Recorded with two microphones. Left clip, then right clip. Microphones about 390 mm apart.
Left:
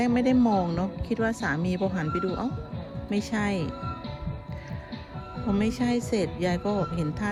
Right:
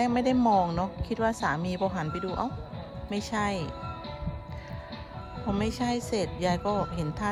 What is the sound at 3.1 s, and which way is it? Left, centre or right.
Speech, centre.